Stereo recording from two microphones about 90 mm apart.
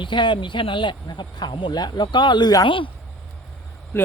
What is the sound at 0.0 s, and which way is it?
Speech, 60° left (ahead or behind).